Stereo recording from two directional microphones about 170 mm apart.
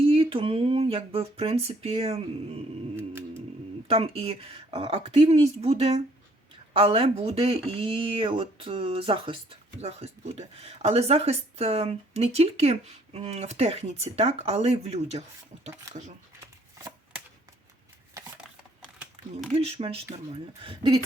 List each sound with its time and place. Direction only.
0.0 s speech: 35° right (ahead or behind)
3.8 s speech: 35° right (ahead or behind)
16.7 s shuffling cards: 20° right (ahead or behind)
19.5 s speech: 35° right (ahead or behind)